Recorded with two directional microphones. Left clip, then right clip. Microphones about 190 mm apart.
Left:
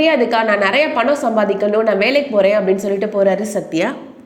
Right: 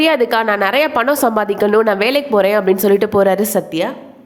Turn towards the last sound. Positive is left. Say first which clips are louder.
# right 2 dB
turn(degrees=-25)  # may be behind; listen again after turning